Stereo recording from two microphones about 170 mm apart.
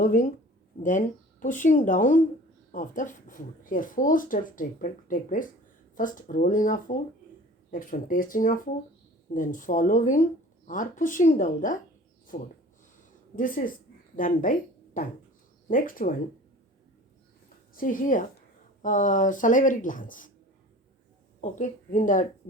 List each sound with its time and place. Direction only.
0.0 s speech: 50° left (ahead or behind)
13.3 s speech: 55° left (ahead or behind)
15.7 s speech: 55° left (ahead or behind)
17.7 s speech: 50° left (ahead or behind)
21.4 s speech: 45° left (ahead or behind)